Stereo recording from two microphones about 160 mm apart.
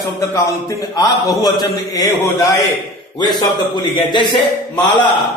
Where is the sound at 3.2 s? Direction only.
25° left (ahead or behind).